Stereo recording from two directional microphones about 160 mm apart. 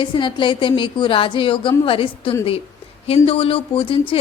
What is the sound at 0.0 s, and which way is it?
Speech, 30° left (ahead or behind).